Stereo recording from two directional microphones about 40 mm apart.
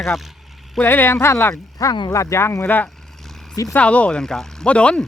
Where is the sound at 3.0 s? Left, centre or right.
Centre.